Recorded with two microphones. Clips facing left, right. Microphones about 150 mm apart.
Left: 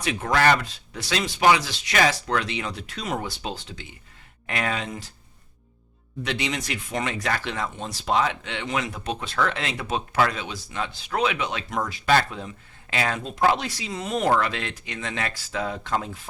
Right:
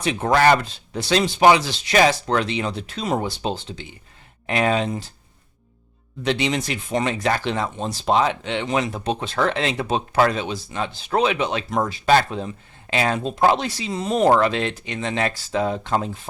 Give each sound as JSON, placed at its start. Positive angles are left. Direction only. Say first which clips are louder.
{"t": 0.0, "sound": "speech", "louder": "right 4 dB", "side_deg": -30}
{"t": 6.2, "sound": "speech", "louder": "right 6 dB", "side_deg": -30}